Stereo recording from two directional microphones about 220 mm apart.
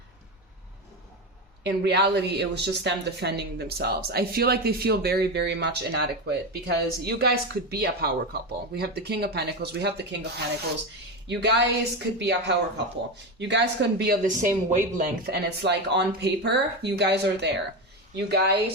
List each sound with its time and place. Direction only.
1.6 s speech: 50° right (ahead or behind)